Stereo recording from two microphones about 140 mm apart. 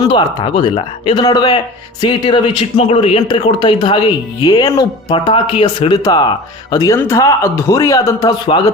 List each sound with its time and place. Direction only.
0.0 s speech: 35° left (ahead or behind)
3.2 s speech: 35° left (ahead or behind)
5.1 s speech: 40° left (ahead or behind)
8.4 s speech: 35° left (ahead or behind)